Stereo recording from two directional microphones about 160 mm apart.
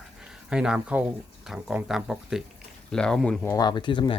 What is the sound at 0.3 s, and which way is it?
Speech, 5° right (ahead or behind).